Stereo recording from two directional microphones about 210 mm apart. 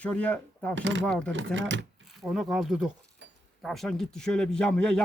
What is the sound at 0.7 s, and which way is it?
Speech, 60° right (ahead or behind).